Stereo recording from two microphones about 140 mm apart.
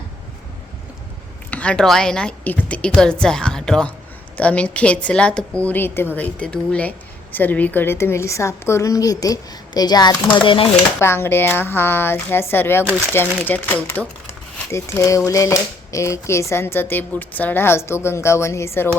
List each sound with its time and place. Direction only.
1.5 s a woman's voice: 10° left (ahead or behind); by 10.7 s 35° left (ahead or behind)
11.0 s speech: 15° left (ahead or behind)